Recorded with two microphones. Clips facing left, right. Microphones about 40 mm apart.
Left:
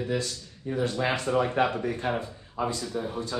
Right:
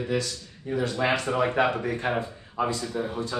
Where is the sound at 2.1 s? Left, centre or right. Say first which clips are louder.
Right 2 dB; right.